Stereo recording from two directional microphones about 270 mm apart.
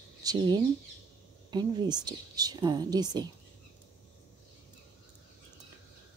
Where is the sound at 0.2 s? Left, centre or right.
Centre.